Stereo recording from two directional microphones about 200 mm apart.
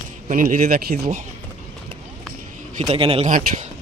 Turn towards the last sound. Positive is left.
turn(degrees=-30)  # may be behind; listen again after turning